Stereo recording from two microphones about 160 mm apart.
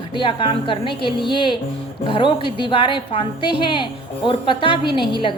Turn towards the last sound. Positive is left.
turn(degrees=30)  # may be behind; listen again after turning